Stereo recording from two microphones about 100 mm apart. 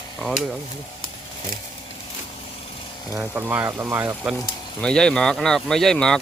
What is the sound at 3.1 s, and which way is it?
Speech, 20° right (ahead or behind).